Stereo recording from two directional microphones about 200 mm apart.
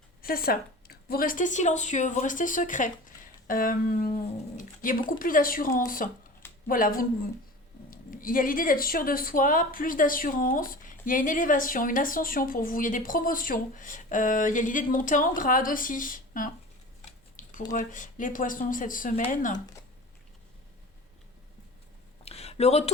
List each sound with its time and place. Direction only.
0.2 s a woman's voice: 50° left (ahead or behind)
4.5 s dog: 40° left (ahead or behind)
5.2 s speech: 45° left (ahead or behind)
17.1 s a sound: 40° left (ahead or behind)
17.7 s speech: 40° left (ahead or behind)
19.5 s speech: 20° left (ahead or behind)
22.2 s a sound: 30° left (ahead or behind)